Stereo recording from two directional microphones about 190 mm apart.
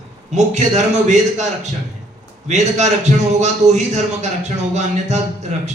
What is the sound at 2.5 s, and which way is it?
A man's voice, 35° right (ahead or behind).